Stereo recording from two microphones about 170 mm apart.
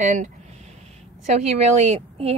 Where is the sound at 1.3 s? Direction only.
40° right (ahead or behind).